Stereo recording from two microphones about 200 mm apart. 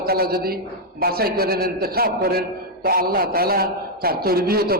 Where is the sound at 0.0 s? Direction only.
50° right (ahead or behind).